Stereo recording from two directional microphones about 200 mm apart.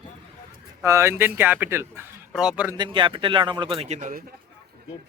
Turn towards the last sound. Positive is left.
turn(degrees=-40)  # may be behind; listen again after turning